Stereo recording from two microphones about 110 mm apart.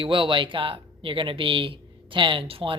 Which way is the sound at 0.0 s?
50° right (ahead or behind).